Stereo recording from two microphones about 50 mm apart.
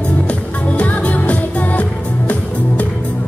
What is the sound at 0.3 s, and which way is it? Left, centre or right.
Music, left.